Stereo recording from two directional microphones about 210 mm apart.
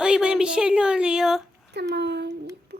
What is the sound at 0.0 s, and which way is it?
Speech, 5° right (ahead or behind).